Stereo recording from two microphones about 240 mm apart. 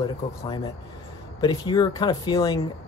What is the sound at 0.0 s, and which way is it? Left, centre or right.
Speech, centre.